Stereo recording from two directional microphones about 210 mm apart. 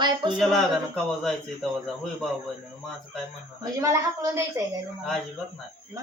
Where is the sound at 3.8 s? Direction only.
15° right (ahead or behind).